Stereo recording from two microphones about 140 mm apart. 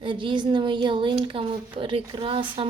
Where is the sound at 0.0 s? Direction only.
35° right (ahead or behind).